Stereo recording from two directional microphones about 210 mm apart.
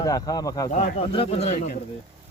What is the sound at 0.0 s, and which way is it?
Speech, 15° left (ahead or behind).